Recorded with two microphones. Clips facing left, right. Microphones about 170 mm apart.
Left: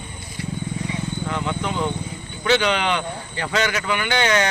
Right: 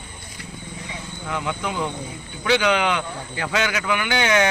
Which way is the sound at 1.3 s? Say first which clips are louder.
Right 1 dB; 10° right (ahead or behind).